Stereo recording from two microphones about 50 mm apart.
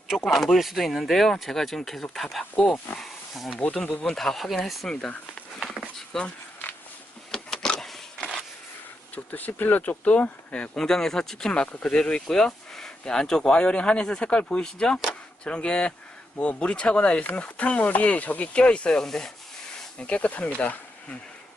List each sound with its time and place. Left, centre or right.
0.3 s speech: centre
3.0 s wild animals: centre
3.5 s speech: left
3.8 s speech: left
4.1 s speech: centre
5.0 s speech: left
6.1 s speech: centre
7.3 s a sound: centre
9.1 s speech: left
10.8 s speech: centre
20.0 s speech: left